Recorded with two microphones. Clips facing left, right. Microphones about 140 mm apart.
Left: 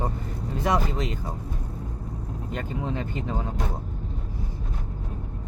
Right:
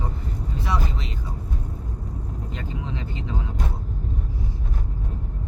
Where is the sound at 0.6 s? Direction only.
45° left (ahead or behind).